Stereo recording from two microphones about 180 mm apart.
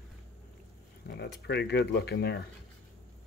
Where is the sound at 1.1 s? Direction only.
65° left (ahead or behind).